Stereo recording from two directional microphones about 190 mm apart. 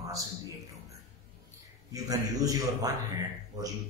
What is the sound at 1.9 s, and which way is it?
A man's voice, 20° right (ahead or behind).